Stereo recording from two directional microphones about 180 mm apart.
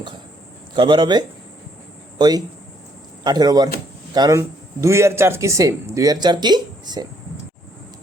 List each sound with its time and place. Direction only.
0.7 s a man's voice: 25° right (ahead or behind)